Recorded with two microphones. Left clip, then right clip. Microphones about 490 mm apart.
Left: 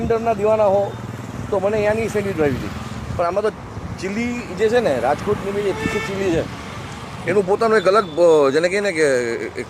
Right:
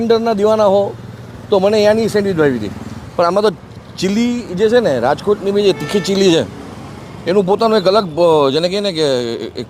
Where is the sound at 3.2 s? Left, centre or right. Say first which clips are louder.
Right 7 dB; right.